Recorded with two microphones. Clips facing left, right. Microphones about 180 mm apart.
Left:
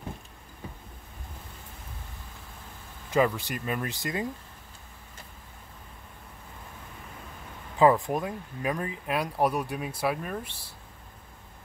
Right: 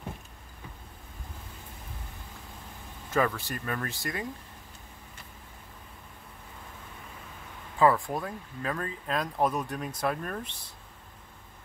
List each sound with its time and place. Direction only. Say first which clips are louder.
3.1 s speech: left 3 dB; 20° left (ahead or behind)
7.8 s speech: left 3 dB; 20° left (ahead or behind)